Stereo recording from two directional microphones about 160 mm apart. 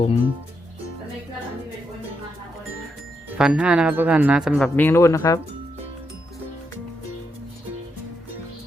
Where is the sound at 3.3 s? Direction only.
5° right (ahead or behind).